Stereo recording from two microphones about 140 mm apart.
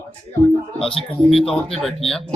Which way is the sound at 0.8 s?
40° left (ahead or behind).